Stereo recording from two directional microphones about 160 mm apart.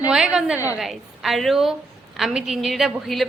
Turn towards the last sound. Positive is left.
turn(degrees=0)  # may be behind; listen again after turning